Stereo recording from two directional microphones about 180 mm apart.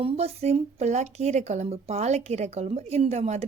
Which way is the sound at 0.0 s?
35° right (ahead or behind).